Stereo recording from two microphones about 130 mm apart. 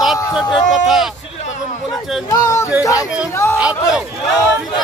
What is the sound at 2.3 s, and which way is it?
Speech, 25° left (ahead or behind).